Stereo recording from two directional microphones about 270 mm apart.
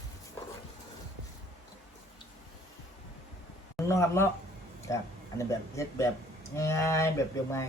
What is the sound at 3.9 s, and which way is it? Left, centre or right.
Speech, centre.